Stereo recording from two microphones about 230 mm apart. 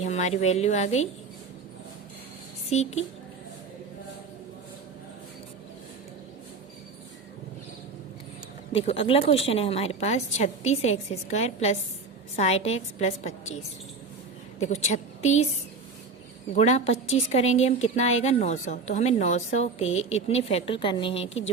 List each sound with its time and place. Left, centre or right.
0.0 s a woman's voice: left
2.6 s a woman's voice: left
8.7 s a woman's voice: left
14.6 s a woman's voice: left
16.5 s a woman's voice: left